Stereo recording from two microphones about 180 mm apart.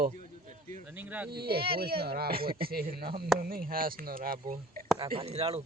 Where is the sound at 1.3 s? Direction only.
60° right (ahead or behind).